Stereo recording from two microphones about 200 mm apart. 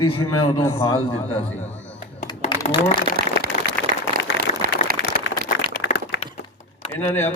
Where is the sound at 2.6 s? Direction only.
35° left (ahead or behind).